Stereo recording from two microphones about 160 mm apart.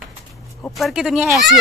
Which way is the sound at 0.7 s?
Centre (ahead or behind).